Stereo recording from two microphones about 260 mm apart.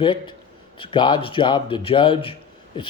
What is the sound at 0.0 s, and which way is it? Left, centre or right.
Speech, centre.